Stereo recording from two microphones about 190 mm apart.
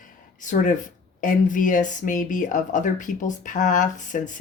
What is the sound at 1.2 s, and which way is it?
Speech, 45° left (ahead or behind).